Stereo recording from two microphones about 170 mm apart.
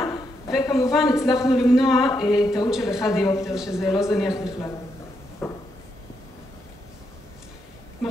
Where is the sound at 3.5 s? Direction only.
5° right (ahead or behind).